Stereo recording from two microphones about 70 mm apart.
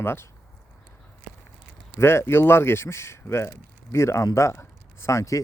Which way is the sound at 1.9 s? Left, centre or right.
Left.